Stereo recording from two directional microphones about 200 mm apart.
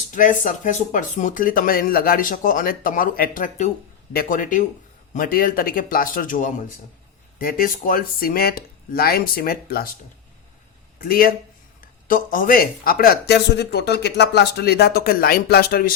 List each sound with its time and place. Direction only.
0.1 s speech: 40° left (ahead or behind)
11.0 s speech: 45° left (ahead or behind)